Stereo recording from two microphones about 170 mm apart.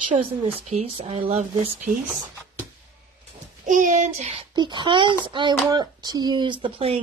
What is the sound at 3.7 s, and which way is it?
Speech, 50° right (ahead or behind).